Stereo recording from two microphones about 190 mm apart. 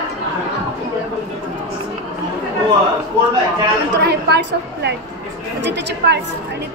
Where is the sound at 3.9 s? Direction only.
60° right (ahead or behind).